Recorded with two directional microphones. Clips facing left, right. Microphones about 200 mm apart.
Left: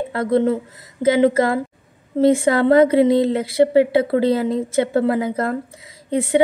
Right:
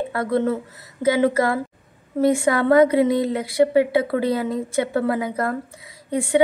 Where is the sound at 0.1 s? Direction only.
20° left (ahead or behind).